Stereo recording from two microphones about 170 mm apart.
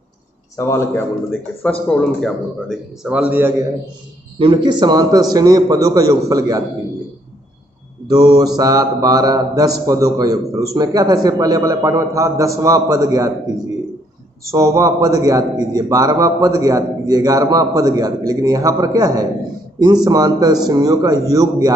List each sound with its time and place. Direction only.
0.6 s a man's voice: 15° left (ahead or behind); by 3.6 s 15° right (ahead or behind)
4.4 s a man's voice: 30° right (ahead or behind)
8.1 s a man's voice: 25° right (ahead or behind)
14.5 s a man's voice: 20° right (ahead or behind)